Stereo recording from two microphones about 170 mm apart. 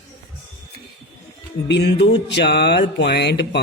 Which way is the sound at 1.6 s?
90° left.